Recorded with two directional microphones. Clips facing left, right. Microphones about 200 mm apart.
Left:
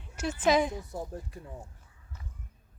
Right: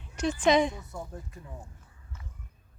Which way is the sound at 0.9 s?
30° left (ahead or behind).